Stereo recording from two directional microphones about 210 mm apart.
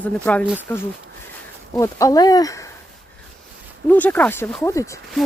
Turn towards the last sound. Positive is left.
turn(degrees=15)  # may be behind; listen again after turning